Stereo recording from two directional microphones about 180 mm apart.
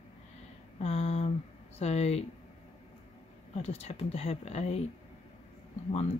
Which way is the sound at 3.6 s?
35° left (ahead or behind).